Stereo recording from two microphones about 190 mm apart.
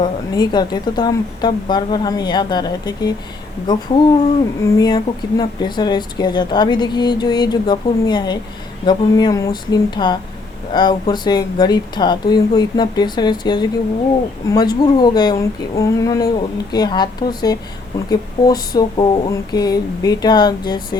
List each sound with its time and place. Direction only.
0.0 s speech: 20° left (ahead or behind)